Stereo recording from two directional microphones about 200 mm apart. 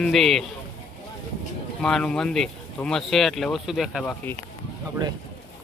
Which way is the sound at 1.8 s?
5° left (ahead or behind).